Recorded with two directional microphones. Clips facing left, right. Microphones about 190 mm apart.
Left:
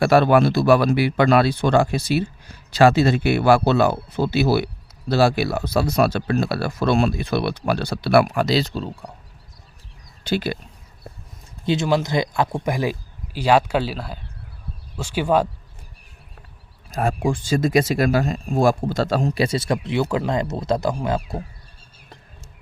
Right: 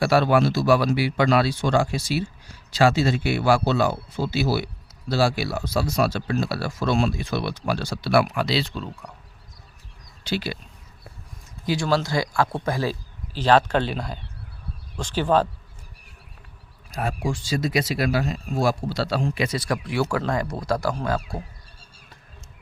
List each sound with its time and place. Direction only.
0.0 s speech: 55° left (ahead or behind); by 9.1 s 30° left (ahead or behind)
10.2 s speech: 50° left (ahead or behind)
11.6 s speech: 25° left (ahead or behind)
16.9 s speech: 45° left (ahead or behind); by 21.2 s 20° left (ahead or behind)